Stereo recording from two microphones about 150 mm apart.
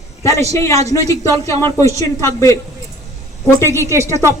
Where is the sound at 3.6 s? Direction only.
20° right (ahead or behind).